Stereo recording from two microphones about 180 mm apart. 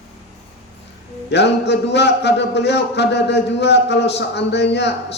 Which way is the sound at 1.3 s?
70° left (ahead or behind).